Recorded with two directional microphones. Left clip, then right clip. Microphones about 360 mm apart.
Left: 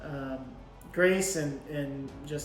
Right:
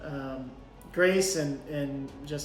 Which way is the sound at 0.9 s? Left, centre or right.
Centre.